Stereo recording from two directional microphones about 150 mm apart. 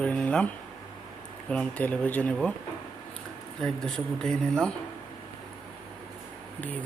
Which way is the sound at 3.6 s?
5° left (ahead or behind).